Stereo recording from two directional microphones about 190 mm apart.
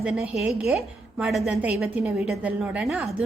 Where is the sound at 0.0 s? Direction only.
5° right (ahead or behind).